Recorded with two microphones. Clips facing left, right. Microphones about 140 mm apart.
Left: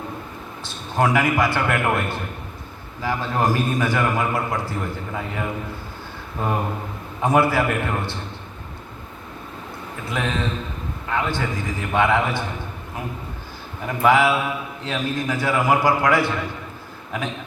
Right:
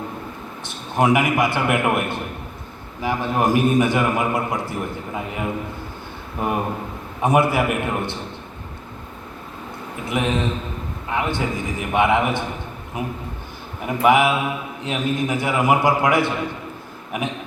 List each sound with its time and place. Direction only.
0.9 s a man's voice: 20° right (ahead or behind)
10.1 s a man's voice: 20° right (ahead or behind)
13.8 s a man's voice: 20° right (ahead or behind)